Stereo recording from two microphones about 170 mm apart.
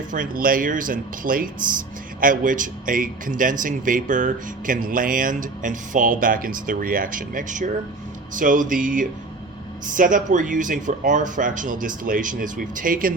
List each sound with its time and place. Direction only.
0.1 s a man's voice: 55° right (ahead or behind)